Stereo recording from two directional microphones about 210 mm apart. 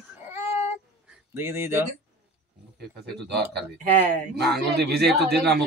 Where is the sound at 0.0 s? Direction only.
10° right (ahead or behind).